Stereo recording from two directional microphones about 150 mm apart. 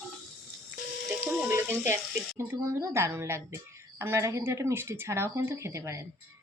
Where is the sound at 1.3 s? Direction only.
10° right (ahead or behind).